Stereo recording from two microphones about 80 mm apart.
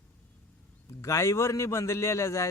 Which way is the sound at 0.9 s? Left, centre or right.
Left.